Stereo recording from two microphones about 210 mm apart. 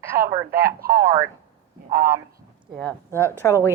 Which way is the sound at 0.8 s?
45° right (ahead or behind).